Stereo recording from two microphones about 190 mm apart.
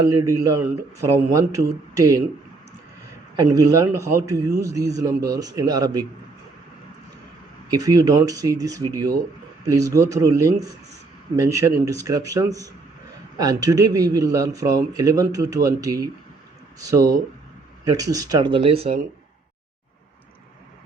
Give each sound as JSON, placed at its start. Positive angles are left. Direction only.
{"t": 0.0, "sound": "a man's voice", "side_deg": -15}
{"t": 3.5, "sound": "a man's voice", "side_deg": -15}
{"t": 7.7, "sound": "a man's voice", "side_deg": -20}